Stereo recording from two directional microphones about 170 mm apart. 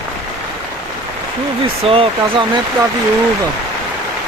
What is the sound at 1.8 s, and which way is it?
Speech, 30° right (ahead or behind).